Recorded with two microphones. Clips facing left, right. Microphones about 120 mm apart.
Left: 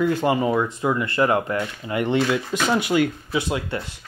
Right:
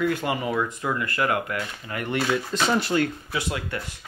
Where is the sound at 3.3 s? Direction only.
25° left (ahead or behind).